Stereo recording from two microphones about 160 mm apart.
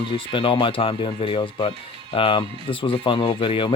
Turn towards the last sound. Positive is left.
turn(degrees=35)  # may be behind; listen again after turning